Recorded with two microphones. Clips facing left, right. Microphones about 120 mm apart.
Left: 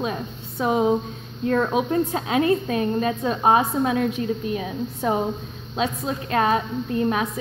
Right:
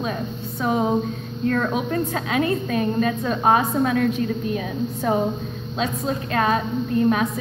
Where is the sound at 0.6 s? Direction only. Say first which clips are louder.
Left 1 dB; 15° left (ahead or behind).